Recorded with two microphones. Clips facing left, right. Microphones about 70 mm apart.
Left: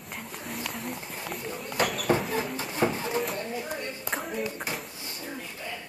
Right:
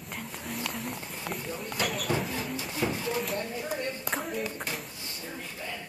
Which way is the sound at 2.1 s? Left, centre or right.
Left.